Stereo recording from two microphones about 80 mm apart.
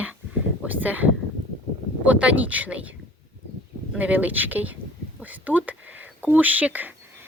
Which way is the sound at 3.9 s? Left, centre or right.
Centre.